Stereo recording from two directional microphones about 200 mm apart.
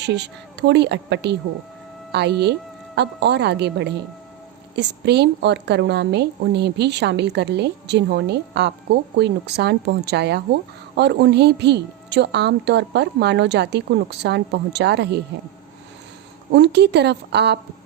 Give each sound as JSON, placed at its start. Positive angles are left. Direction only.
{"t": 0.0, "sound": "a woman's voice", "side_deg": -60}
{"t": 16.5, "sound": "a woman's voice", "side_deg": -60}